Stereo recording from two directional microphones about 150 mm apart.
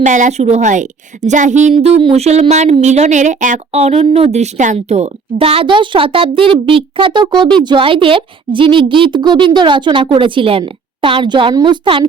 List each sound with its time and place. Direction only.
0.0 s a woman's voice: 55° right (ahead or behind)
1.7 s a woman's voice: 40° right (ahead or behind)